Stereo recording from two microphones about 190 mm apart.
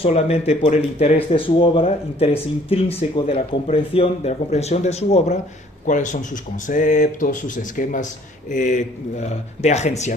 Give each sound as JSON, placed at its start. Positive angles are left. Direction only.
{"t": 0.0, "sound": "speech", "side_deg": 35}